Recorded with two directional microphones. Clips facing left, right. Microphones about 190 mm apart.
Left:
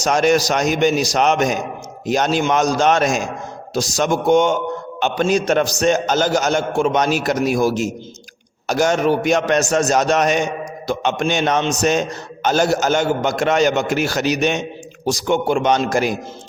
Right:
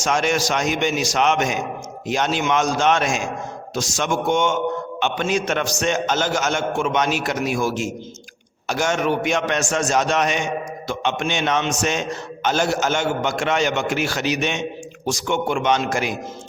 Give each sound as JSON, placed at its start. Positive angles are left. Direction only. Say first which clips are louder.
{"t": 0.0, "sound": "a man's voice", "louder": "left 5 dB", "side_deg": 40}